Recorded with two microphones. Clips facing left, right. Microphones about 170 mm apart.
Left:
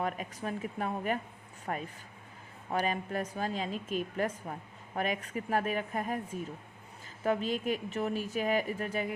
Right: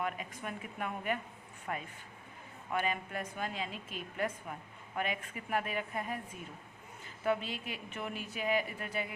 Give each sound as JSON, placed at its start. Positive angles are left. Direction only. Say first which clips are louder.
{"t": 0.0, "sound": "a woman's voice", "louder": "left 4 dB", "side_deg": 40}
{"t": 7.3, "sound": "a woman's voice", "louder": "left 4 dB", "side_deg": 45}